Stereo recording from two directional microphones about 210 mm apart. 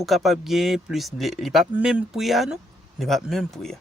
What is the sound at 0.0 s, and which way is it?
Speech, centre (ahead or behind).